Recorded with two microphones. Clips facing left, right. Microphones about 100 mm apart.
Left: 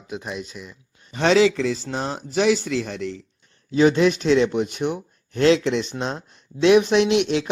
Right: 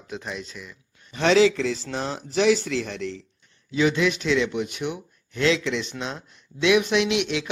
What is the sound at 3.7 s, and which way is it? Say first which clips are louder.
Speech: left 5 dB; 40° left (ahead or behind).